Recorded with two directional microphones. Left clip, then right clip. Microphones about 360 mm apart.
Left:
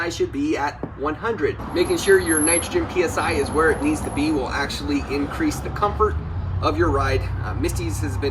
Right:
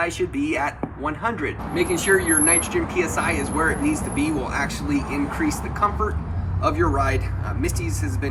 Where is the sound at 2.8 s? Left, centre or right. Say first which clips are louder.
Left 1 dB; centre.